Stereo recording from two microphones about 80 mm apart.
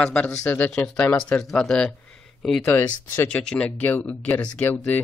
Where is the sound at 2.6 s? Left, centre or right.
Left.